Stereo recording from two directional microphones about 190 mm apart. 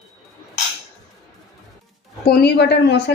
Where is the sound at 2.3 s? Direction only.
60° left (ahead or behind).